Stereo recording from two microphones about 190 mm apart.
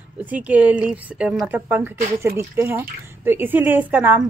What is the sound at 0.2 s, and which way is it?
Speech, 10° right (ahead or behind).